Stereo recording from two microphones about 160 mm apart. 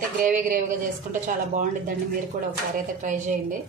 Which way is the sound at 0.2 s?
55° right (ahead or behind).